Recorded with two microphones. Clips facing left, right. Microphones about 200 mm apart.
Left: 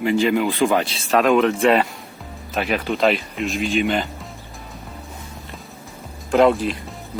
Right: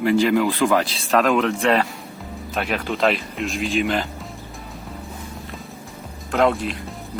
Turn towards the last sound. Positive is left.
turn(degrees=0)  # may be behind; listen again after turning